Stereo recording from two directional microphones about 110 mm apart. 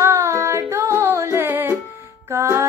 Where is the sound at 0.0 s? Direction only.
25° right (ahead or behind).